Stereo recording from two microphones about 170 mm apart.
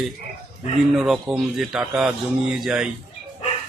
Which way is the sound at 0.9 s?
5° right (ahead or behind).